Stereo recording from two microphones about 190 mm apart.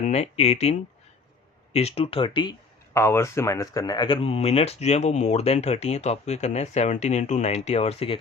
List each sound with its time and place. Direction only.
0.0 s speech: 35° left (ahead or behind)